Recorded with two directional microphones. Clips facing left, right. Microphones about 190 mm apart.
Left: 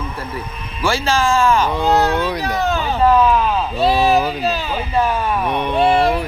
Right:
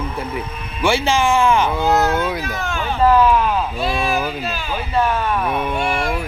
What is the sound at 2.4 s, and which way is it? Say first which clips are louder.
Speech: left 6 dB; 35° left (ahead or behind).